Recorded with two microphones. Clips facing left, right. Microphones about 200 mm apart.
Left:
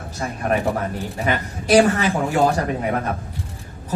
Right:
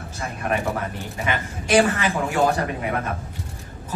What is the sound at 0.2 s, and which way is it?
A man's voice, 35° left (ahead or behind).